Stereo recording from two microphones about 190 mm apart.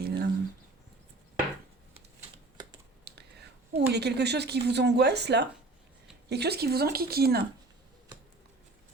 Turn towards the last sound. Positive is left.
turn(degrees=-55)  # may be behind; listen again after turning